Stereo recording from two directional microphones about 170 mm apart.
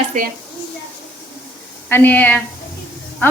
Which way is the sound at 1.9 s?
10° left (ahead or behind).